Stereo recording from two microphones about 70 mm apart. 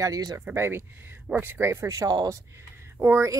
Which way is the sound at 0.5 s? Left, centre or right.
Right.